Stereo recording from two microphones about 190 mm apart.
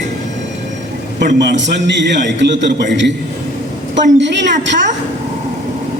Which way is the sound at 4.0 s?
70° right (ahead or behind).